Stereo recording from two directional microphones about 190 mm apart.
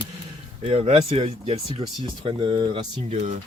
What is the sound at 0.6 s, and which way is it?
Speech, 30° right (ahead or behind).